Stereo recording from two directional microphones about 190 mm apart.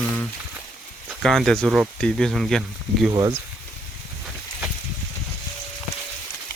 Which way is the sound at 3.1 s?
20° right (ahead or behind).